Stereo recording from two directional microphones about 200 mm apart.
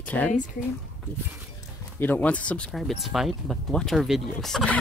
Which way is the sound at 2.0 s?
10° left (ahead or behind).